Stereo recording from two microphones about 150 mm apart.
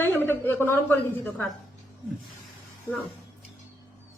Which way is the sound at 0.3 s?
15° left (ahead or behind).